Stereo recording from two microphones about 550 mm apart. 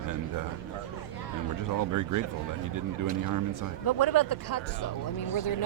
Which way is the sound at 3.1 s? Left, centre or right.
Right.